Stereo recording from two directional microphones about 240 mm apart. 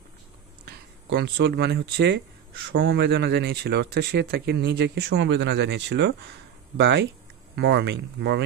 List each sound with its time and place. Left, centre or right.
0.7 s speech: right